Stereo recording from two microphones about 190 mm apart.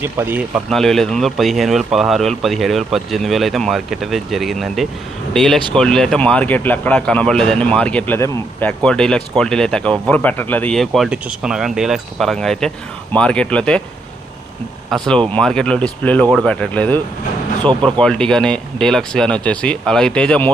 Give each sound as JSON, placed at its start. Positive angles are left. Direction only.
{"t": 0.0, "sound": "speech", "side_deg": -10}
{"t": 14.8, "sound": "speech", "side_deg": 0}
{"t": 17.7, "sound": "speech", "side_deg": -25}
{"t": 18.0, "sound": "speech", "side_deg": 5}